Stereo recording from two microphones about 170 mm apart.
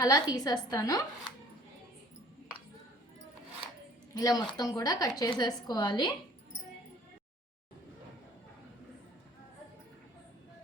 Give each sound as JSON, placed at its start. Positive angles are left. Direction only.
{"t": 0.0, "sound": "a woman's voice", "side_deg": 20}
{"t": 4.1, "sound": "a woman's voice", "side_deg": 20}